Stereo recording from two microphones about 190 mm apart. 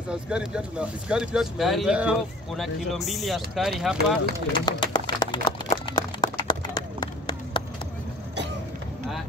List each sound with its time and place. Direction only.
0.1 s speech: 5° right (ahead or behind)
4.5 s speech: 25° left (ahead or behind)
4.9 s a sound: 25° left (ahead or behind)